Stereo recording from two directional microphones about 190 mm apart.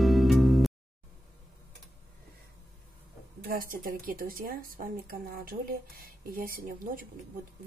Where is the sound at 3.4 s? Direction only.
50° right (ahead or behind).